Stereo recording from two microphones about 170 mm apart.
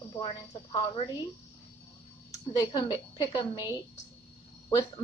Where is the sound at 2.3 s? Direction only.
20° left (ahead or behind).